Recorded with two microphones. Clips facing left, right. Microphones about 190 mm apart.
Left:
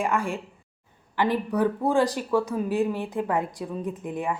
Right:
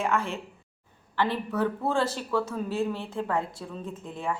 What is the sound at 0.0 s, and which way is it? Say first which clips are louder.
Speech: left 2 dB; 10° left (ahead or behind).